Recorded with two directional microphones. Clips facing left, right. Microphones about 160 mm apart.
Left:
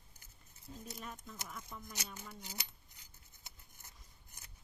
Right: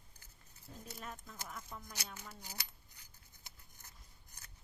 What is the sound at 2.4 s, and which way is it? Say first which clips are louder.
Cutlery: left 2 dB; 20° left (ahead or behind).